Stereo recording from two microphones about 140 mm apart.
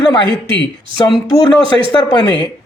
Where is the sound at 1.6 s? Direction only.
40° right (ahead or behind).